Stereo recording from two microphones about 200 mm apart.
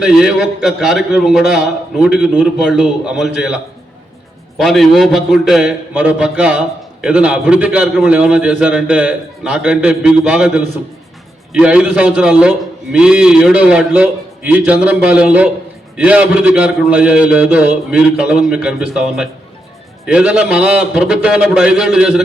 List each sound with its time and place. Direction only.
0.0 s a man's voice: 5° right (ahead or behind)
4.5 s a man's voice: centre (ahead or behind)